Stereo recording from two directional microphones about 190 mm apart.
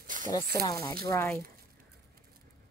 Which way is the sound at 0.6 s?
20° left (ahead or behind).